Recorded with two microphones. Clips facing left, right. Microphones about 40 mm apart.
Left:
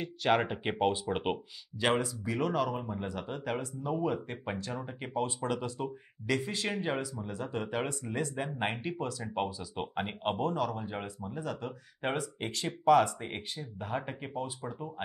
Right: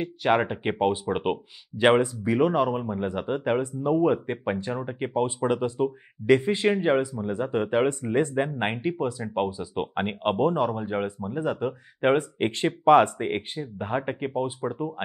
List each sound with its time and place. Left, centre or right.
0.0 s speech: centre
1.8 s speech: right